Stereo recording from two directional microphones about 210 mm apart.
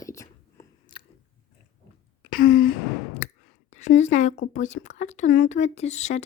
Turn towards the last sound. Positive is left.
turn(degrees=35)  # may be behind; listen again after turning